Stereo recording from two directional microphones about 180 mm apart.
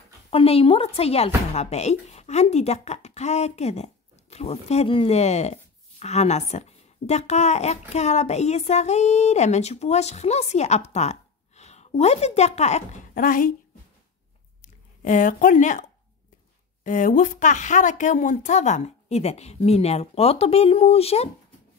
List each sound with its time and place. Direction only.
0.3 s speech: 30° left (ahead or behind); by 13.6 s 50° left (ahead or behind)
14.6 s speech: 45° left (ahead or behind)
16.8 s speech: 45° left (ahead or behind)